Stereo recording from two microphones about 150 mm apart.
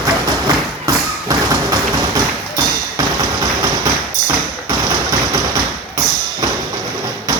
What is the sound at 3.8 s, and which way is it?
Thump, 25° right (ahead or behind).